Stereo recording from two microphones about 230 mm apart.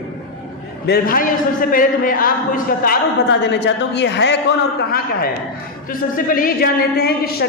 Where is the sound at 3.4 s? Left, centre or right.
Left.